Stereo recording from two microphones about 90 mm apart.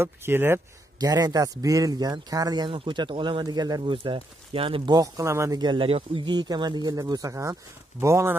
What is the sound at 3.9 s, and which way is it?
Speech, 70° right (ahead or behind).